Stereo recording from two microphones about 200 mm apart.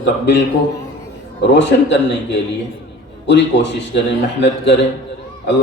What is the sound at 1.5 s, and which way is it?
Speech, 60° left (ahead or behind).